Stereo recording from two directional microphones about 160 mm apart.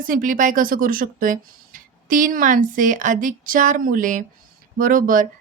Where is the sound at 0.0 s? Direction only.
60° right (ahead or behind).